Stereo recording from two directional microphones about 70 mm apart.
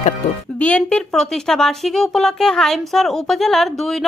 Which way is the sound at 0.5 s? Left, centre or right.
Centre.